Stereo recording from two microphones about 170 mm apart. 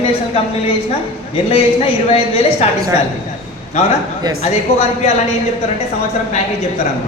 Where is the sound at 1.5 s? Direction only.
35° left (ahead or behind).